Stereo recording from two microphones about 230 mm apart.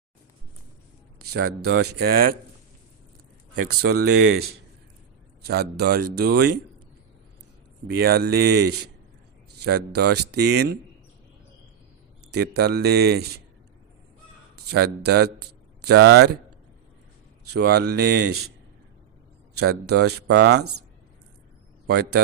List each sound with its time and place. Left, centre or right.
1.2 s speech: right
3.8 s speech: right
7.9 s speech: right
12.3 s speech: right
14.7 s speech: right
17.5 s speech: right
19.9 s speech: right
21.8 s speech: right